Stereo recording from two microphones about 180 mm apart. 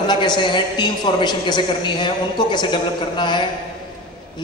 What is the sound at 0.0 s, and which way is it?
A man's voice, 25° left (ahead or behind).